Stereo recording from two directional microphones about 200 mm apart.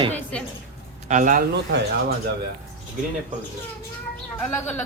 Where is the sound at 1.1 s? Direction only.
40° right (ahead or behind).